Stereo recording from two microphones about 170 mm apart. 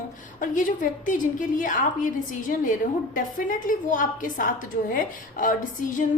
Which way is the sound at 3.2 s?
50° left (ahead or behind).